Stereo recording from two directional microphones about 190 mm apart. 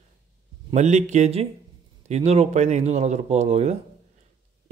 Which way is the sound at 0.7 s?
35° right (ahead or behind).